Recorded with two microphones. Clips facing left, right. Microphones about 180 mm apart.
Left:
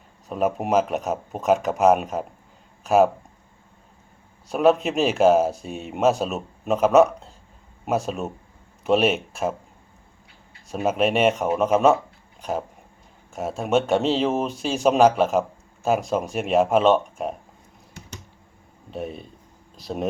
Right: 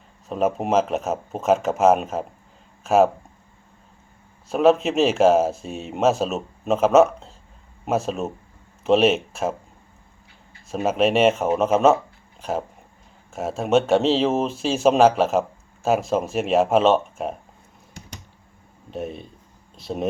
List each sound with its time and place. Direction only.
0.3 s speech: centre (ahead or behind)
4.4 s speech: centre (ahead or behind)
10.7 s speech: centre (ahead or behind)
13.3 s speech: centre (ahead or behind)
18.9 s speech: centre (ahead or behind)